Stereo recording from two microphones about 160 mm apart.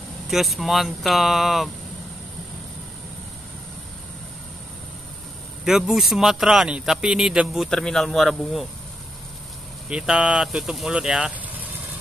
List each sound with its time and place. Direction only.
0.3 s speech: centre (ahead or behind)
5.7 s speech: centre (ahead or behind)
9.8 s speech: 5° right (ahead or behind)